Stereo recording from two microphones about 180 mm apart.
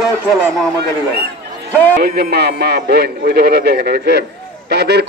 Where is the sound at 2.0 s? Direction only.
55° right (ahead or behind).